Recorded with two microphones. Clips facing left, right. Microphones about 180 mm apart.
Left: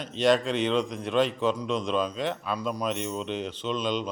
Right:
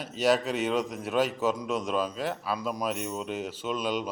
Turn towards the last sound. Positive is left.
turn(degrees=-5)  # may be behind; listen again after turning